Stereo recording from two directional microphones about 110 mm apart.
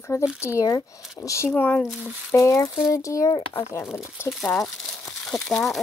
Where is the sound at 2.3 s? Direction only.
30° left (ahead or behind).